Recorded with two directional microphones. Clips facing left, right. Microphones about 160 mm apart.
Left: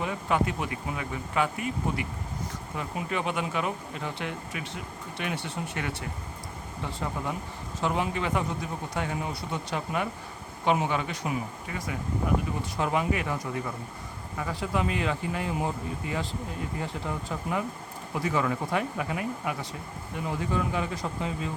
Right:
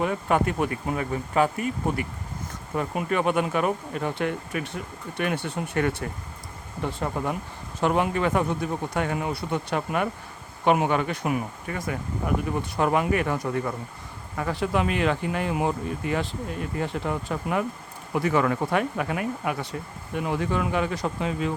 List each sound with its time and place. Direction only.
0.0 s speech: 50° right (ahead or behind)
2.7 s speech: 55° right (ahead or behind); by 21.5 s 75° right (ahead or behind)